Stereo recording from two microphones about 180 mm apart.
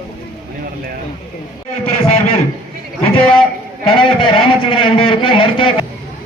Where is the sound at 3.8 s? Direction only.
30° left (ahead or behind).